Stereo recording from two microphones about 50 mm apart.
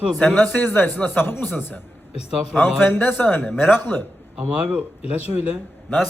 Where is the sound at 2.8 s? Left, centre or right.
Left.